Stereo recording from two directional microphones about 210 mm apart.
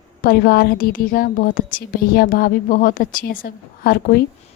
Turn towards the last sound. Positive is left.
turn(degrees=45)  # may be behind; listen again after turning